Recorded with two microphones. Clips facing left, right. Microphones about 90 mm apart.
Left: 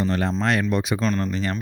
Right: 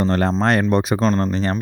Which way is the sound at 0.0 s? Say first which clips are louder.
Right 5 dB; 50° right (ahead or behind).